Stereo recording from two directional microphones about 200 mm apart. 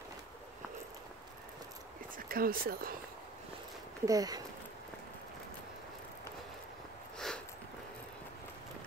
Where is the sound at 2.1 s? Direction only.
45° right (ahead or behind).